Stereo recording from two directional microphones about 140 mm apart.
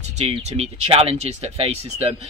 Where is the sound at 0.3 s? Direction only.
45° right (ahead or behind).